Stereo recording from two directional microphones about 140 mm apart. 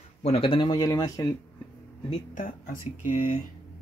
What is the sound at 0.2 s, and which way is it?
Speech, 45° left (ahead or behind).